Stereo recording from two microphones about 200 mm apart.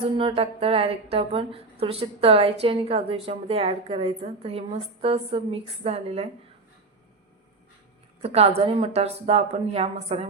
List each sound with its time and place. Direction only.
0.0 s a woman's voice: 25° right (ahead or behind)
8.2 s a woman's voice: 30° right (ahead or behind)